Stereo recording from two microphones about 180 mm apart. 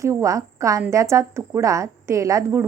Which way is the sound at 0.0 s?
15° right (ahead or behind).